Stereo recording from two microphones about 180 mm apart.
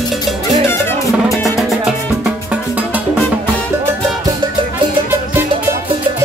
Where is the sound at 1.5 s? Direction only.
Centre (ahead or behind).